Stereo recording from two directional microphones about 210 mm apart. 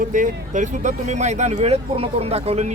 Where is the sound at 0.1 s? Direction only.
35° right (ahead or behind).